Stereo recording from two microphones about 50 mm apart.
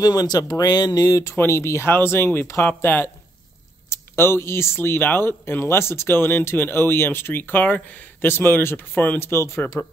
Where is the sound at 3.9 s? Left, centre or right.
Left.